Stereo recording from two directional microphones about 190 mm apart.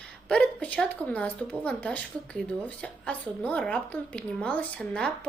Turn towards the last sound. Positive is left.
turn(degrees=5)  # may be behind; listen again after turning